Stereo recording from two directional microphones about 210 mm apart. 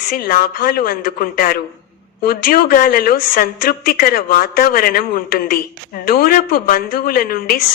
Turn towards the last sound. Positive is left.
turn(degrees=45)  # may be behind; listen again after turning